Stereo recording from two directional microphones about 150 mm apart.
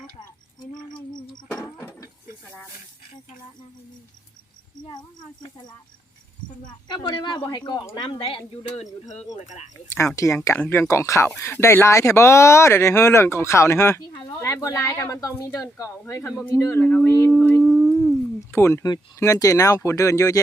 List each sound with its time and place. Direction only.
1.5 s a sound: 15° left (ahead or behind)
4.8 s speech: 30° left (ahead or behind)
6.8 s speech: 25° left (ahead or behind)
9.3 s speech: 50° left (ahead or behind)
10.2 s speech: 20° left (ahead or behind)
17.6 s a sound: centre (ahead or behind)
18.3 s speech: 20° left (ahead or behind)